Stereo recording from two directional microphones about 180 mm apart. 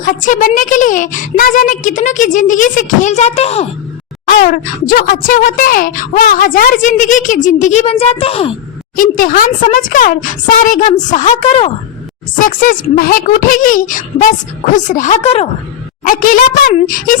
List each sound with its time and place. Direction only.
0.0 s speech: 45° left (ahead or behind)
4.3 s speech: 50° left (ahead or behind); by 8.5 s 30° left (ahead or behind)
9.0 s speech: 50° left (ahead or behind)
12.4 s speech: 50° left (ahead or behind)
16.0 s speech: 50° left (ahead or behind)